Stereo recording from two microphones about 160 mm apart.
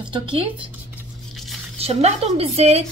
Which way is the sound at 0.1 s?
35° right (ahead or behind).